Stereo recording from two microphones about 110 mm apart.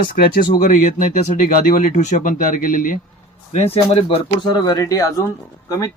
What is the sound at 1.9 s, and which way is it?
Speech, 90° left.